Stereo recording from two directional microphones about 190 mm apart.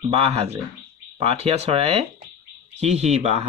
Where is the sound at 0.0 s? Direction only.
30° right (ahead or behind).